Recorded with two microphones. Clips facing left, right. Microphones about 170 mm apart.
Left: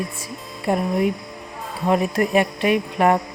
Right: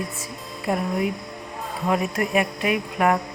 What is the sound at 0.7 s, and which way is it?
Speech, 25° left (ahead or behind).